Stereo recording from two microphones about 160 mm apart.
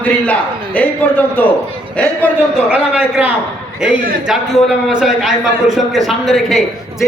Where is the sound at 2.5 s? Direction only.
5° right (ahead or behind).